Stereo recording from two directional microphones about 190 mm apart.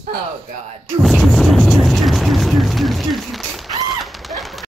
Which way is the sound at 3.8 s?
Centre (ahead or behind).